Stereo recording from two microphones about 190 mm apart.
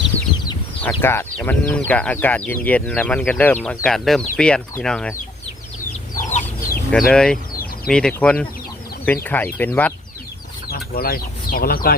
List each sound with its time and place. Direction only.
0.8 s speech: 10° left (ahead or behind)
6.1 s chicken: 40° left (ahead or behind)
6.9 s speech: 5° left (ahead or behind)
10.7 s speech: 50° left (ahead or behind)